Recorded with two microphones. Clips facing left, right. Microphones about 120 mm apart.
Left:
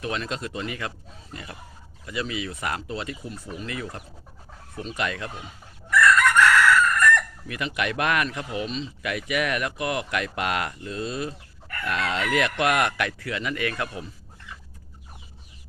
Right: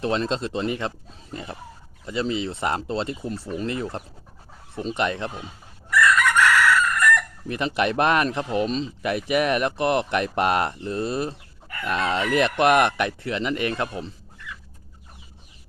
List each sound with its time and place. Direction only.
0.0 s speech: 30° right (ahead or behind)
6.6 s chicken: 5° right (ahead or behind)
7.4 s speech: 30° right (ahead or behind)